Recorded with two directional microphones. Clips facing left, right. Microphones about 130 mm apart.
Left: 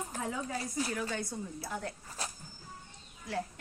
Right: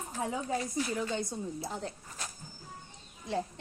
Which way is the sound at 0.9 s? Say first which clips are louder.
Right 2 dB; 20° right (ahead or behind).